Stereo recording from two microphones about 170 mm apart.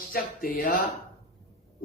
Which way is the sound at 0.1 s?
55° left (ahead or behind).